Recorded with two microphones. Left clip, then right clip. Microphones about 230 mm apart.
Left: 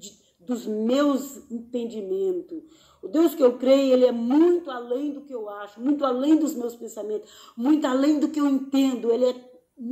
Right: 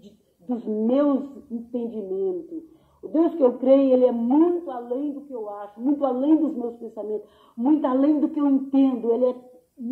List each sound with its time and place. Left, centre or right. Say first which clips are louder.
0.0 s a woman's voice: left 2 dB; left